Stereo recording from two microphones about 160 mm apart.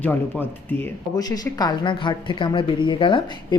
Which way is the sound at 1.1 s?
25° left (ahead or behind).